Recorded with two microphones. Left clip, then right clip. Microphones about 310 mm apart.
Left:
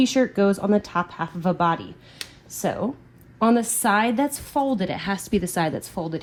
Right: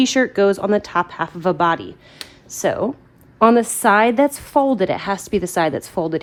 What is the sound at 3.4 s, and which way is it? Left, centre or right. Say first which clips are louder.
A woman's voice: right 7 dB; right.